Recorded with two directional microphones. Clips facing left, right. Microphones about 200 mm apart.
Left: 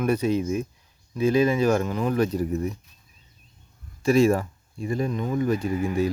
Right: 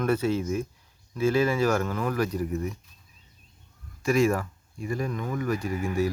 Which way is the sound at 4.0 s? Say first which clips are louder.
Left 4 dB; 30° left (ahead or behind).